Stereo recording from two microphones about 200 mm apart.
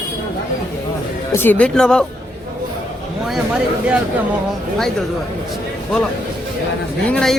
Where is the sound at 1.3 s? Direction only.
10° left (ahead or behind).